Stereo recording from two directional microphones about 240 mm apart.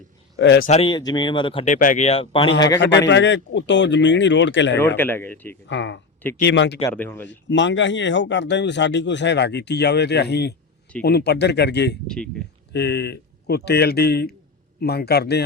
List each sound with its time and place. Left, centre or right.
0.3 s speech: left
0.7 s speech: left
3.1 s speech: left
4.8 s speech: centre
5.6 s speech: left
6.9 s speech: centre
7.3 s speech: left
12.0 s speech: centre
12.7 s a man's voice: left